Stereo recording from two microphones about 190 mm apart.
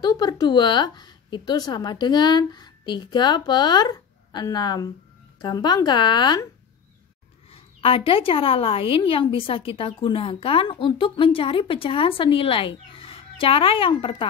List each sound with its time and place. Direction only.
0.0 s a woman's voice: 20° left (ahead or behind)
7.5 s a woman's voice: 30° left (ahead or behind)